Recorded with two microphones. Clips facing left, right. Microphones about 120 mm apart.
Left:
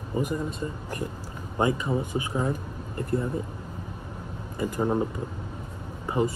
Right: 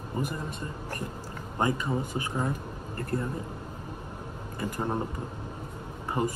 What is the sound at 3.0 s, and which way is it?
Speech, 15° left (ahead or behind).